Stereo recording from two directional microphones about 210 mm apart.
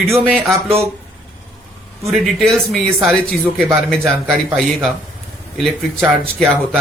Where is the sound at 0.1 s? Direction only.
Centre (ahead or behind).